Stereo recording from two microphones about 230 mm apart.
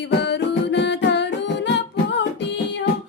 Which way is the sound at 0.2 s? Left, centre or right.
Left.